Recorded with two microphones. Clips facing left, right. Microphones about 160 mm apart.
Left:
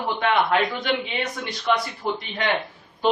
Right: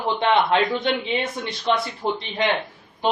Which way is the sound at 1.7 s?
25° right (ahead or behind).